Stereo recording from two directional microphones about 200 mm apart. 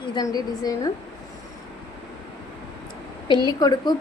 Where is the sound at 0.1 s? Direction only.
20° left (ahead or behind).